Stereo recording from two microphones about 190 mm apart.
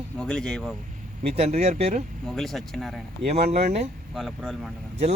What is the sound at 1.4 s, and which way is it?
Speech, 35° right (ahead or behind).